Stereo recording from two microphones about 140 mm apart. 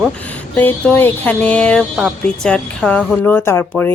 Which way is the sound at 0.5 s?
10° left (ahead or behind).